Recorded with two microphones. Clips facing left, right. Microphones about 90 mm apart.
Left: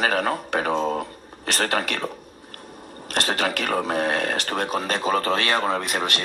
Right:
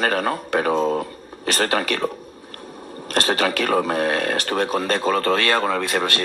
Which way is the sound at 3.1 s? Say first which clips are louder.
Right 4 dB; 50° right (ahead or behind).